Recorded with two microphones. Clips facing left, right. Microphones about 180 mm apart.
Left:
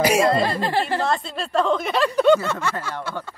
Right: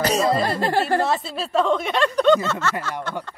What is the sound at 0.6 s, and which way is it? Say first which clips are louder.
Speech: right 2 dB; 45° right (ahead or behind).